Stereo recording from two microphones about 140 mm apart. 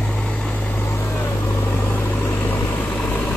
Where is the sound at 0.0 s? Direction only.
10° left (ahead or behind).